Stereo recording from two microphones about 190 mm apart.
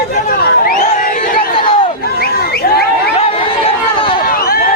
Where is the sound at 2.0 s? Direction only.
55° left (ahead or behind).